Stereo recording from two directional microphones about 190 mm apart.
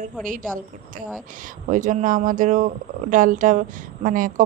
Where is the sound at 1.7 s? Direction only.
40° right (ahead or behind).